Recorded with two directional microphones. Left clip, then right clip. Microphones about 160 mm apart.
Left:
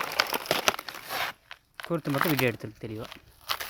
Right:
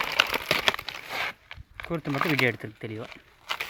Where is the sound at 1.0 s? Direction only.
35° left (ahead or behind).